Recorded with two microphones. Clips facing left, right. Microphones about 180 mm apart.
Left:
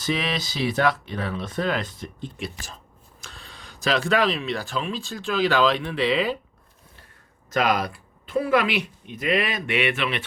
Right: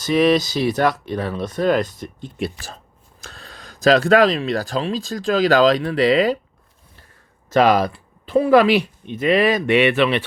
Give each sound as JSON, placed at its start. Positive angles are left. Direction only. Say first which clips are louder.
{"t": 0.0, "sound": "speech", "louder": "right 11 dB", "side_deg": -45}
{"t": 3.2, "sound": "speech", "louder": "right 4 dB", "side_deg": -40}
{"t": 7.6, "sound": "speech", "louder": "right 7 dB", "side_deg": -30}